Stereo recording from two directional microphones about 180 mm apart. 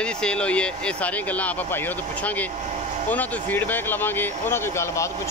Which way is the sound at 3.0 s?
10° left (ahead or behind).